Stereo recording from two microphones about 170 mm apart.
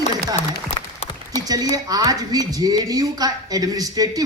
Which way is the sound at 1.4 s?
20° right (ahead or behind).